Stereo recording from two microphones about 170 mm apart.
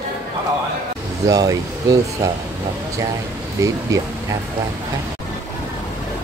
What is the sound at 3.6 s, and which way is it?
Speech, 20° right (ahead or behind).